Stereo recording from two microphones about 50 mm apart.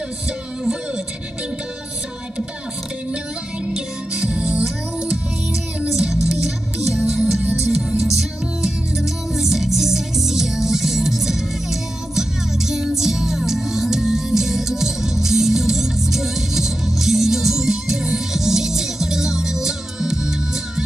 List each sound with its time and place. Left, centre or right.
3.7 s music: centre